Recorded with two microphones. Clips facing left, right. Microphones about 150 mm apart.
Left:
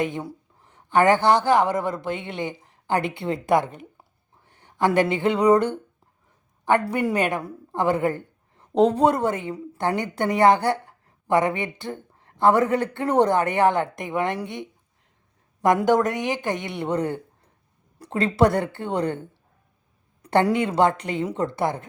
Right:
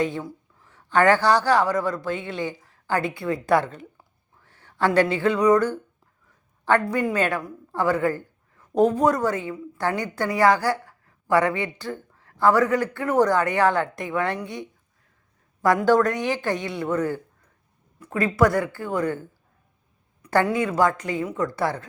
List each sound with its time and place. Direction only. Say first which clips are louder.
0.0 s speech: right 1 dB; 20° left (ahead or behind)
3.9 s a sound: left 1 dB; 20° left (ahead or behind)
6.9 s a woman's voice: even; 20° left (ahead or behind)